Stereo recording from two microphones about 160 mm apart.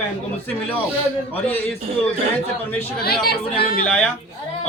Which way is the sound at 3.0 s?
70° left (ahead or behind).